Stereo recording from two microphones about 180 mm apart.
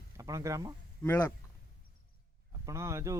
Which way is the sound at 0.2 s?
20° right (ahead or behind).